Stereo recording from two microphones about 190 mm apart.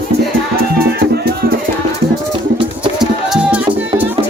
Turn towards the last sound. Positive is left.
turn(degrees=0)  # may be behind; listen again after turning